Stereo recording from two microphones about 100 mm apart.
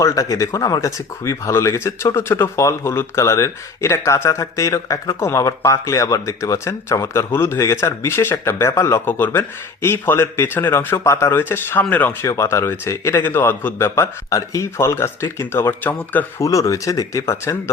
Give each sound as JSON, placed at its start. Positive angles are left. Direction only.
{"t": 0.0, "sound": "speech", "side_deg": 35}
{"t": 12.2, "sound": "speech", "side_deg": 30}
{"t": 16.4, "sound": "speech", "side_deg": 30}